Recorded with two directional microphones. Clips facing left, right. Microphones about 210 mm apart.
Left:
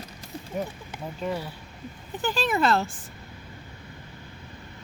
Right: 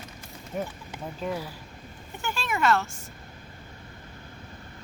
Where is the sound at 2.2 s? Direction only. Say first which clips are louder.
Left 3 dB; 35° left (ahead or behind).